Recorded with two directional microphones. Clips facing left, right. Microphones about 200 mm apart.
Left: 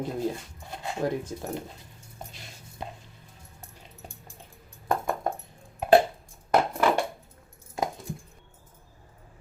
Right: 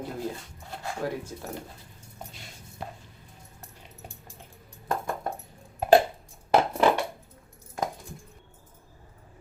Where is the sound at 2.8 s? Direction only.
20° left (ahead or behind).